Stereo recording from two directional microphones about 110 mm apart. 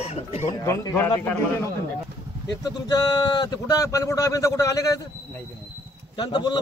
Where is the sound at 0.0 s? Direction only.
80° left.